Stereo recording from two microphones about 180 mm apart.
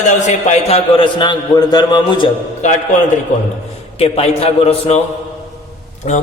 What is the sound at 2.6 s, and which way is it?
Speech, 40° left (ahead or behind).